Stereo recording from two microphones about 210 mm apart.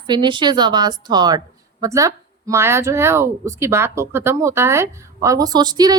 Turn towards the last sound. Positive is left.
turn(degrees=-20)  # may be behind; listen again after turning